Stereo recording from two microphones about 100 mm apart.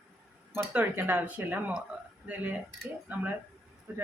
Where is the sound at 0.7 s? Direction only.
20° right (ahead or behind).